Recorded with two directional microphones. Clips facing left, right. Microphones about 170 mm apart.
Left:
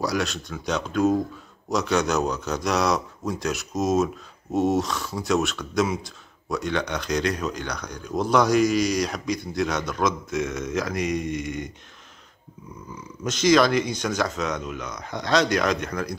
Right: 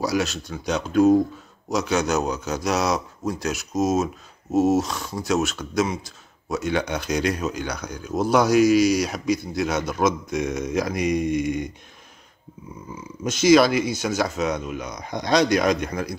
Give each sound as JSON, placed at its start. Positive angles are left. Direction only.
{"t": 0.0, "sound": "speech", "side_deg": -5}
{"t": 13.2, "sound": "speech", "side_deg": -10}